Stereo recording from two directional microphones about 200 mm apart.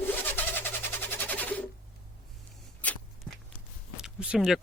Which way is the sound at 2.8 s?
5° left (ahead or behind).